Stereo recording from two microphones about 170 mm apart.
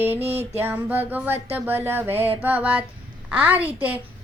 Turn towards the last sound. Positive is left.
turn(degrees=-10)  # may be behind; listen again after turning